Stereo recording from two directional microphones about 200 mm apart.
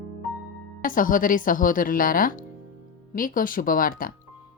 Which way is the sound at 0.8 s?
45° left (ahead or behind).